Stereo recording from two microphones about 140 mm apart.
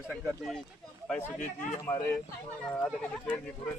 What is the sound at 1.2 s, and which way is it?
Speech, 15° left (ahead or behind).